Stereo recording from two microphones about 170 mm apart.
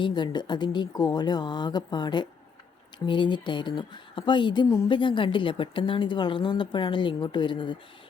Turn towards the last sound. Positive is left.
turn(degrees=25)  # may be behind; listen again after turning